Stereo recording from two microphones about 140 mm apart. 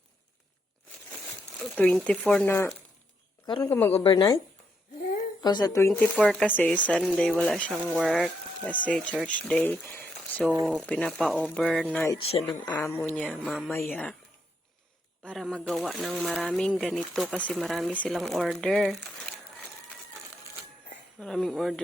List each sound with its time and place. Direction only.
1.7 s speech: 10° left (ahead or behind)
3.4 s speech: 30° left (ahead or behind)
3.7 s speech: 15° left (ahead or behind)
3.9 s speech: 40° left (ahead or behind)
5.4 s speech: 30° left (ahead or behind)
5.9 s speech: 10° left (ahead or behind)
7.8 s speech: 15° right (ahead or behind)
8.0 s speech: 5° left (ahead or behind)
10.6 s speech: centre (ahead or behind)
12.1 s speech: 45° left (ahead or behind)
12.7 s speech: 15° left (ahead or behind)
15.2 s speech: 5° left (ahead or behind)
21.2 s speech: 5° left (ahead or behind)